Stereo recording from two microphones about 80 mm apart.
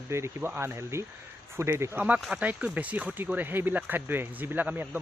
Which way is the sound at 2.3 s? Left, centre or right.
Centre.